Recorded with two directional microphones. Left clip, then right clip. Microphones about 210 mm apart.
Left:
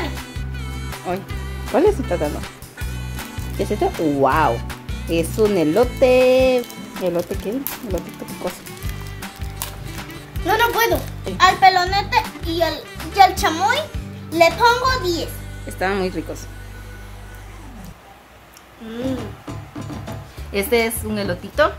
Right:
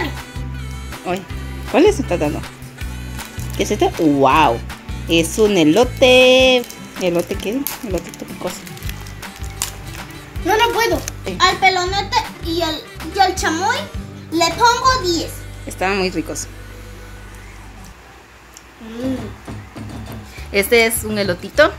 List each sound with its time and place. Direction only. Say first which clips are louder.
0.1 s music: right 1 dB; centre (ahead or behind)
3.7 s a child's voice: right 4 dB; centre (ahead or behind)
6.3 s speech: right 3 dB; 25° left (ahead or behind)
6.6 s music: right 3 dB; centre (ahead or behind)
11.3 s a child's voice: left 1 dB; 15° left (ahead or behind)
13.1 s speech: left 2 dB; 25° left (ahead or behind)
14.3 s a child's voice: even; 5° left (ahead or behind)
20.5 s a woman's voice: right 5 dB; 10° right (ahead or behind)